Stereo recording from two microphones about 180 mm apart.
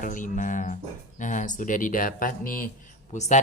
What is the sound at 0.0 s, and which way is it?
Speech, 45° left (ahead or behind).